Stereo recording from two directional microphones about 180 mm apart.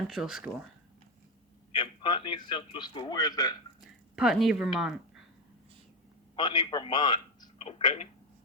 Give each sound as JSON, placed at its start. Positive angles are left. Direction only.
{"t": 0.1, "sound": "speech", "side_deg": 0}
{"t": 1.7, "sound": "a man's voice", "side_deg": 25}
{"t": 4.1, "sound": "speech", "side_deg": 0}
{"t": 6.3, "sound": "a man's voice", "side_deg": 25}